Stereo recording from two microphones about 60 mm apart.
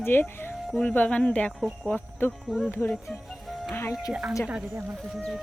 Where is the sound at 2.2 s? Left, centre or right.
Left.